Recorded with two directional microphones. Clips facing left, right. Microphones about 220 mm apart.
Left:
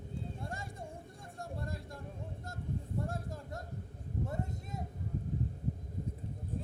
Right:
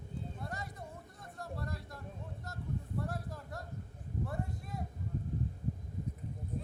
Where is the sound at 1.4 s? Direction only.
25° left (ahead or behind).